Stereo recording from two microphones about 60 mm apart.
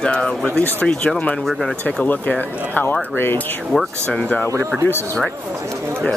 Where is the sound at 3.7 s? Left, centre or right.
Centre.